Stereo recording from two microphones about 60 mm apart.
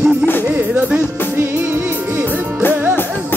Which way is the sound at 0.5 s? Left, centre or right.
Right.